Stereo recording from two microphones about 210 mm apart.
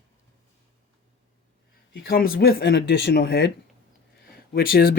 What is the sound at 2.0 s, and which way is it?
Speech, 45° left (ahead or behind).